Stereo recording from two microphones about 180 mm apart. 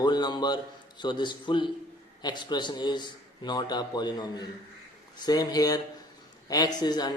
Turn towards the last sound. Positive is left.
turn(degrees=20)  # may be behind; listen again after turning